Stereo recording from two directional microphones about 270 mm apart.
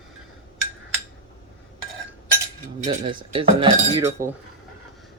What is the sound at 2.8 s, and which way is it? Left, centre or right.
Cutlery, right.